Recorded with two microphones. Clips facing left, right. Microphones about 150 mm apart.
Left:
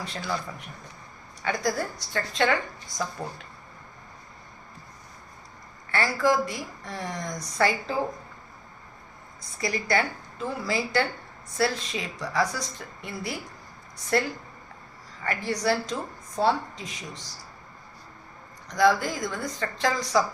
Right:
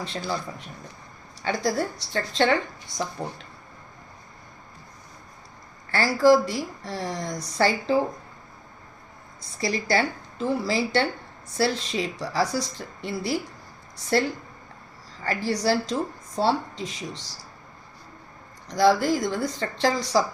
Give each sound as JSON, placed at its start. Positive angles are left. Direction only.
{"t": 0.0, "sound": "a woman's voice", "side_deg": -25}
{"t": 1.4, "sound": "a woman's voice", "side_deg": -30}
{"t": 5.9, "sound": "a woman's voice", "side_deg": -35}
{"t": 9.6, "sound": "a woman's voice", "side_deg": -30}
{"t": 18.7, "sound": "a woman's voice", "side_deg": -30}